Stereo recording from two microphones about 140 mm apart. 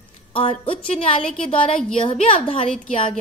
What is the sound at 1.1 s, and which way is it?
A woman's voice, 40° left (ahead or behind).